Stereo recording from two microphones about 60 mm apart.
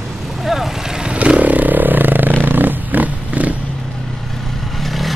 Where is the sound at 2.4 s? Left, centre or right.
Right.